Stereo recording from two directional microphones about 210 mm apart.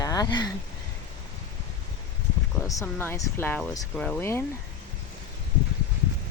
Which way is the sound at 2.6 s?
15° left (ahead or behind).